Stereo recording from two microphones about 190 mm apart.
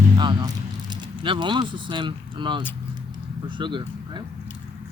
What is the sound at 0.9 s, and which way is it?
Speech, 25° right (ahead or behind).